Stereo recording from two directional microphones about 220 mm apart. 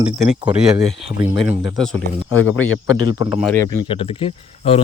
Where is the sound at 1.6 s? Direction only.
Centre (ahead or behind).